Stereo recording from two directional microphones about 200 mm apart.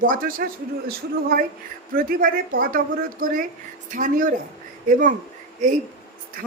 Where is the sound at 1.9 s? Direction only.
45° right (ahead or behind).